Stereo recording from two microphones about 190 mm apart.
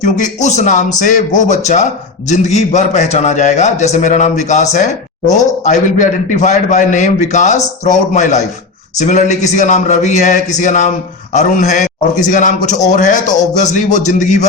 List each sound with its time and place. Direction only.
0.0 s a man's voice: 40° left (ahead or behind)